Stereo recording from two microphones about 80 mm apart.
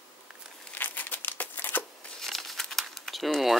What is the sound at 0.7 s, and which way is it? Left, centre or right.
Crumpling, left.